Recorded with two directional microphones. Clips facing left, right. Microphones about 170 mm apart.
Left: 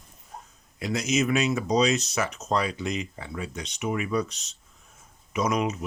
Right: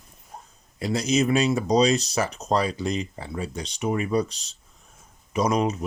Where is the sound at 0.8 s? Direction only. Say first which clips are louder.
Right 3 dB; 35° right (ahead or behind).